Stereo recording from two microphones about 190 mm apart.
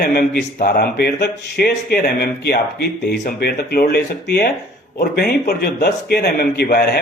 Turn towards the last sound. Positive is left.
turn(degrees=55)  # may be behind; listen again after turning